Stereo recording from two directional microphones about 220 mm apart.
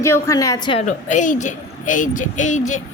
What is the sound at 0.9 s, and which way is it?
Speech, 35° left (ahead or behind).